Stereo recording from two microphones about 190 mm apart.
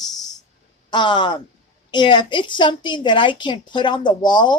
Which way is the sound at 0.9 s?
25° left (ahead or behind).